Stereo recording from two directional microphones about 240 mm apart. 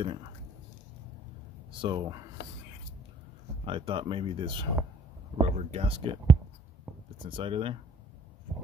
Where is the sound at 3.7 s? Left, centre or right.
Right.